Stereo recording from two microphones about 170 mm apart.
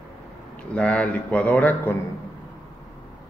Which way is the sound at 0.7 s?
10° left (ahead or behind).